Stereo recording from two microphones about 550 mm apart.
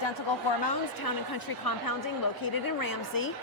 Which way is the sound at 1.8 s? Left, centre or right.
Left.